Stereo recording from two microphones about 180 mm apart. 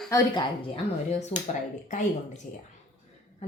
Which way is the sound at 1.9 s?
45° left (ahead or behind).